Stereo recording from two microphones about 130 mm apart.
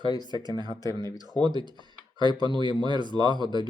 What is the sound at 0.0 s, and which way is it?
Speech, 30° left (ahead or behind).